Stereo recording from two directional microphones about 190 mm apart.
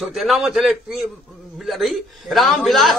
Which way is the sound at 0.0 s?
Centre (ahead or behind).